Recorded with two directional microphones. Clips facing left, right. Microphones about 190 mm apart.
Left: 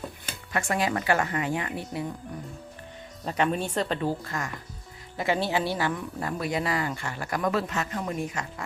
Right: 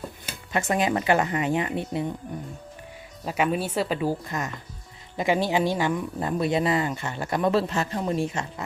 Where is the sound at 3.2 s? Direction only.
5° right (ahead or behind).